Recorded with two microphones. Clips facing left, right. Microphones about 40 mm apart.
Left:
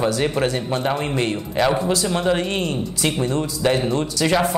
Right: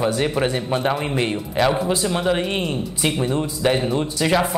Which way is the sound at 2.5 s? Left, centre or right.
Centre.